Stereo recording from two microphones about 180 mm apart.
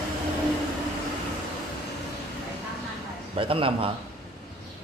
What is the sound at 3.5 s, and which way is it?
Speech, 30° right (ahead or behind).